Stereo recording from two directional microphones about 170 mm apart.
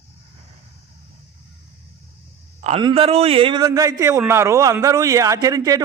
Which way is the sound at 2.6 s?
40° right (ahead or behind).